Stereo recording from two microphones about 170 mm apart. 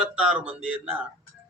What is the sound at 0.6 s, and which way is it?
Speech, 5° right (ahead or behind).